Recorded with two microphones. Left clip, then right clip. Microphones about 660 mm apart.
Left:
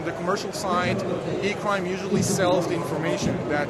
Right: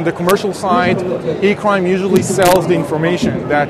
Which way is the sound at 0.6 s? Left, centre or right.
Right.